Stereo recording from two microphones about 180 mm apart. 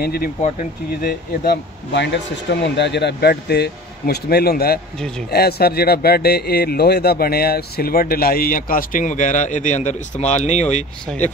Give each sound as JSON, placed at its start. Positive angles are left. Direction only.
{"t": 0.0, "sound": "speech", "side_deg": 55}
{"t": 0.4, "sound": "speech", "side_deg": 40}
{"t": 1.4, "sound": "speech", "side_deg": 70}
{"t": 11.1, "sound": "speech", "side_deg": 5}